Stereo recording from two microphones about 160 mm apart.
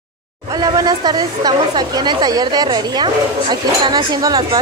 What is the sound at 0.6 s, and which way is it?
Speech, 25° right (ahead or behind).